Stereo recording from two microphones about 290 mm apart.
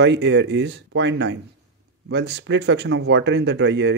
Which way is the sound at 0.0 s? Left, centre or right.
Right.